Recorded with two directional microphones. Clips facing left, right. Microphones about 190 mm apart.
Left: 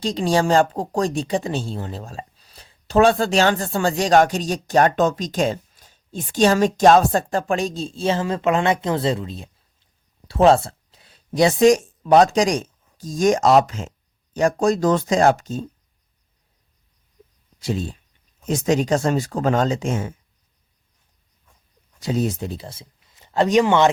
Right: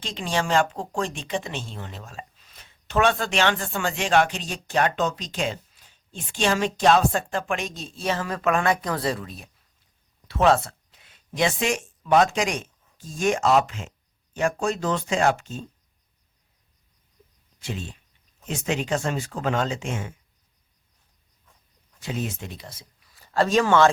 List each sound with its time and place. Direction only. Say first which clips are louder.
0.0 s speech: left 8 dB; 35° left (ahead or behind)
17.6 s speech: left 8 dB; 35° left (ahead or behind)
22.0 s speech: left 8 dB; 35° left (ahead or behind); by 23.9 s 20° left (ahead or behind)